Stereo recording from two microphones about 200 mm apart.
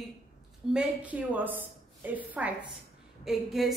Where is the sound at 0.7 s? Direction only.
5° right (ahead or behind).